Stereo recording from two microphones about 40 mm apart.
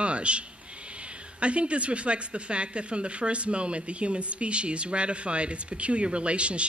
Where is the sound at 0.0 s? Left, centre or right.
Right.